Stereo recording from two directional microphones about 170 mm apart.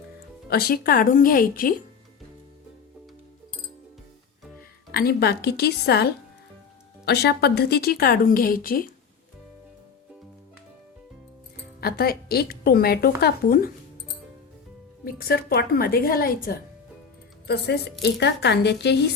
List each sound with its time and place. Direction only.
0.5 s speech: 60° left (ahead or behind)
4.9 s a woman's voice: 65° left (ahead or behind)
11.8 s speech: 65° left (ahead or behind)
15.0 s speech: 65° left (ahead or behind)
17.4 s a woman's voice: 75° left (ahead or behind)